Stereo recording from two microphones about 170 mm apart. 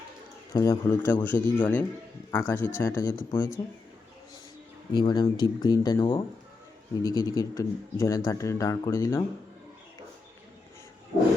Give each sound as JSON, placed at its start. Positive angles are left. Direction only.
{"t": 0.5, "sound": "speech", "side_deg": 20}
{"t": 4.9, "sound": "a man's voice", "side_deg": 25}